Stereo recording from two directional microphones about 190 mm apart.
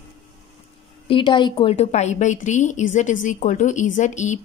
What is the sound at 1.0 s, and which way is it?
A woman's voice, 25° left (ahead or behind).